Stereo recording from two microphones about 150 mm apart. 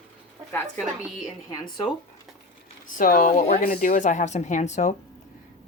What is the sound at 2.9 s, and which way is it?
Speech, 65° left (ahead or behind).